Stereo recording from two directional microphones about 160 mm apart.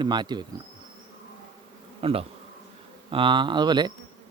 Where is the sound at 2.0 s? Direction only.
35° right (ahead or behind).